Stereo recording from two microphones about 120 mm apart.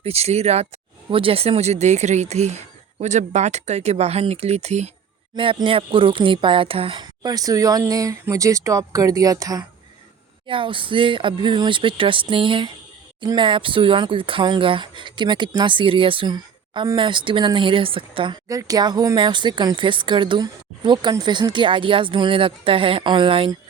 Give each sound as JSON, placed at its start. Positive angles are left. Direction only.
{"t": 0.0, "sound": "speech", "side_deg": -60}
{"t": 1.1, "sound": "speech", "side_deg": -50}
{"t": 5.3, "sound": "speech", "side_deg": -40}
{"t": 7.0, "sound": "speech", "side_deg": -35}
{"t": 10.4, "sound": "speech", "side_deg": -45}
{"t": 18.4, "sound": "speech", "side_deg": -30}